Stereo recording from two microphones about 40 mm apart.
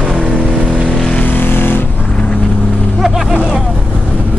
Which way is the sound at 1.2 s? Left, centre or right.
Left.